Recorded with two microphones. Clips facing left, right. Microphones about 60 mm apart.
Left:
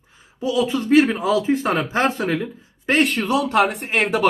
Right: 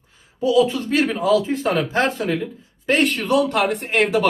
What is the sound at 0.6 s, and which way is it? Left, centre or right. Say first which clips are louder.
Speech: left 3 dB; left.